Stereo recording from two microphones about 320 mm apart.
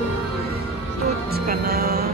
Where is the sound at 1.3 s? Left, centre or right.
Right.